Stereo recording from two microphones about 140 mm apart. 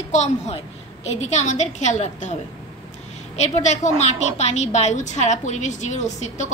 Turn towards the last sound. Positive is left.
turn(degrees=55)  # may be behind; listen again after turning